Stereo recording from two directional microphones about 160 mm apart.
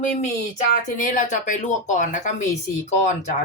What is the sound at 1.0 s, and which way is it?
Speech, 55° left (ahead or behind).